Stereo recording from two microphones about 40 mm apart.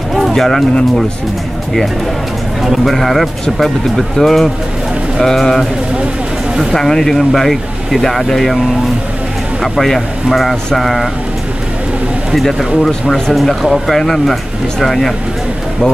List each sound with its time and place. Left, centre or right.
0.3 s speech: centre
2.6 s a man's voice: centre
6.7 s speech: centre
9.6 s speech: centre
12.4 s speech: centre